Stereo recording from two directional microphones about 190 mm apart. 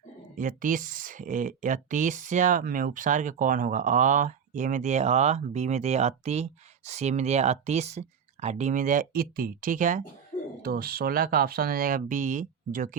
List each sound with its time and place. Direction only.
0.3 s speech: 45° right (ahead or behind)